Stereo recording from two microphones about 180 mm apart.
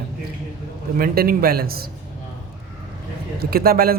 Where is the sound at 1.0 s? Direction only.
55° right (ahead or behind).